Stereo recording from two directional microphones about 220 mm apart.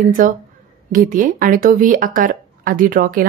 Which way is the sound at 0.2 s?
35° right (ahead or behind).